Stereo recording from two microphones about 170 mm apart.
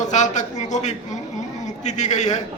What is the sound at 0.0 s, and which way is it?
A man's voice, 45° left (ahead or behind).